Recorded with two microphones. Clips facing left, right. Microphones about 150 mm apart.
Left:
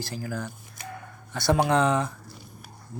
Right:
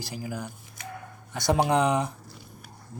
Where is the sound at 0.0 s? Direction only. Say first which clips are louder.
Left 2 dB; 15° right (ahead or behind).